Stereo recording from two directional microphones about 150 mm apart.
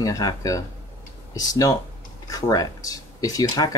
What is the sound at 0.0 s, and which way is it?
Speech, 25° left (ahead or behind).